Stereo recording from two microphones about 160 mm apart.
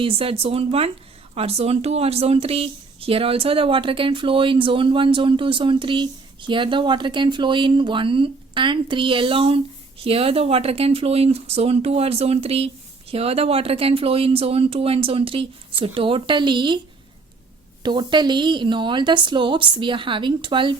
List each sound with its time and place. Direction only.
0.0 s speech: 35° right (ahead or behind)
17.8 s speech: 30° right (ahead or behind)